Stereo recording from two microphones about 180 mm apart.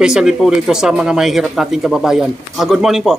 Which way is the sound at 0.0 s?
5° right (ahead or behind).